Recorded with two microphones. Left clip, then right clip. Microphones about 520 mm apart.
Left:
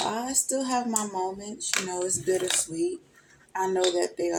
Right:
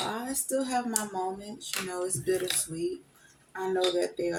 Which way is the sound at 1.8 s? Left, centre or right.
Right.